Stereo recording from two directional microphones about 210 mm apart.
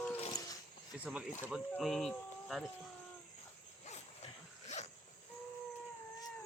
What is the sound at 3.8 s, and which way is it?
Dog, 30° left (ahead or behind).